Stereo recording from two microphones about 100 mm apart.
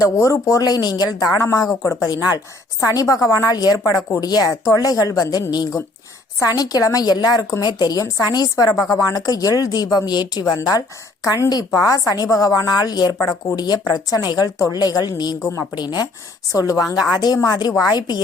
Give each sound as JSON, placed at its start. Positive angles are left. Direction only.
{"t": 0.0, "sound": "a woman's voice", "side_deg": 30}